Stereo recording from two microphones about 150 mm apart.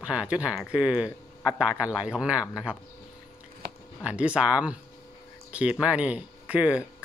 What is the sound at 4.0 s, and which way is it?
Speech, 10° right (ahead or behind).